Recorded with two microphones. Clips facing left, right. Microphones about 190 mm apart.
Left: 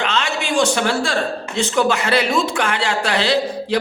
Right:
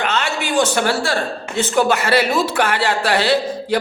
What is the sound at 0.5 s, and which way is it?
A man's voice, 5° right (ahead or behind).